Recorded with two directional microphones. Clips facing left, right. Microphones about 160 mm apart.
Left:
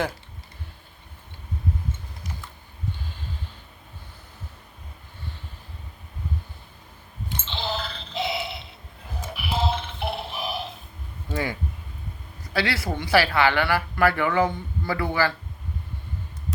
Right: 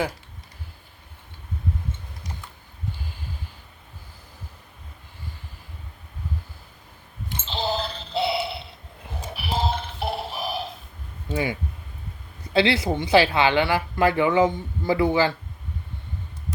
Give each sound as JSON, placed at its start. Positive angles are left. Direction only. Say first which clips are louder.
{"t": 7.4, "sound": "music", "louder": "right 5 dB", "side_deg": -40}
{"t": 9.3, "sound": "a sound", "louder": "even", "side_deg": -40}
{"t": 11.3, "sound": "speech", "louder": "right 2 dB", "side_deg": -15}
{"t": 12.5, "sound": "speech", "louder": "right 6 dB", "side_deg": -20}